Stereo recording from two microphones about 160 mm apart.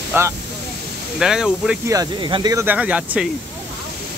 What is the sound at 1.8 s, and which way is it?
Speech, 25° right (ahead or behind).